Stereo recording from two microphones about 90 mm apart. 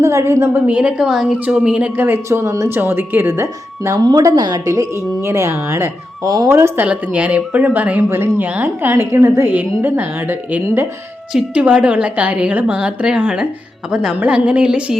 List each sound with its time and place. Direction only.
0.0 s a woman's voice: 35° right (ahead or behind)
0.7 s a woman's voice: 15° right (ahead or behind); by 4.0 s 35° right (ahead or behind)
4.0 s a woman's voice: 45° right (ahead or behind)
6.2 s speech: 45° right (ahead or behind)
6.8 s a woman's voice: 15° right (ahead or behind)
11.3 s a woman's voice: 10° right (ahead or behind)